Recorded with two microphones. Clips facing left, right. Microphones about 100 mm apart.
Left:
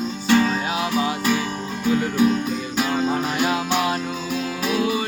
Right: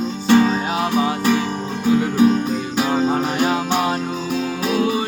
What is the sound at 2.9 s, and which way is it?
Music, 20° right (ahead or behind).